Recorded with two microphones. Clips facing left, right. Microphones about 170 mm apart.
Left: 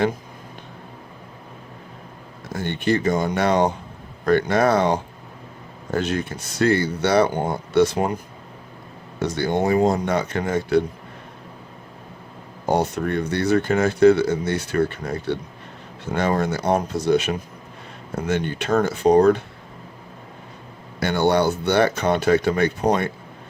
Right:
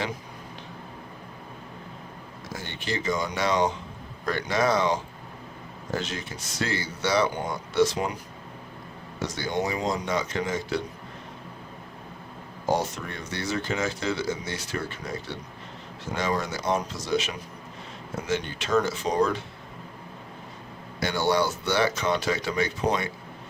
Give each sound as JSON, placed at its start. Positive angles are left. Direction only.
{"t": 2.5, "sound": "speech", "side_deg": 55}
{"t": 12.6, "sound": "speech", "side_deg": 60}
{"t": 21.0, "sound": "speech", "side_deg": 55}